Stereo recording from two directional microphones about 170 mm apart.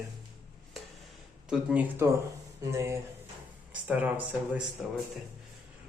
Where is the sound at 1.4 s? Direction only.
5° right (ahead or behind).